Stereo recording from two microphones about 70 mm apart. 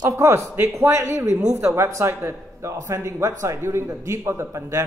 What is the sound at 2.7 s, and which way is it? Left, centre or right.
A man's voice, right.